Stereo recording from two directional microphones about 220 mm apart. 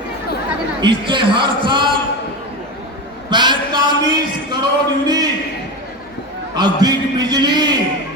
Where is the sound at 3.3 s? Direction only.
20° right (ahead or behind).